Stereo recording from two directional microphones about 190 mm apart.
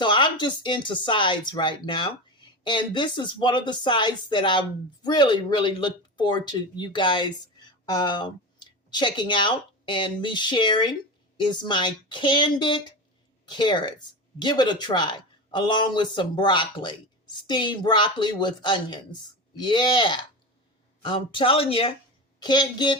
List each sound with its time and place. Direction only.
0.0 s a woman's voice: 25° left (ahead or behind)